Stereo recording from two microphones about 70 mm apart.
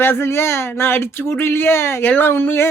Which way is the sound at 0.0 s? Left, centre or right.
Left.